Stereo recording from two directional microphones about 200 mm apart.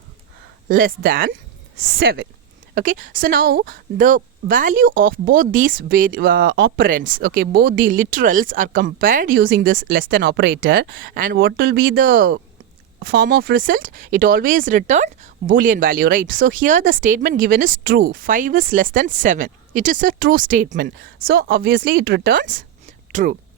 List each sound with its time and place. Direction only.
0.7 s a woman's voice: 45° right (ahead or behind)
1.8 s speech: 65° right (ahead or behind)
2.7 s a woman's voice: 40° right (ahead or behind)
10.1 s a woman's voice: 60° right (ahead or behind)
11.9 s a woman's voice: 45° right (ahead or behind)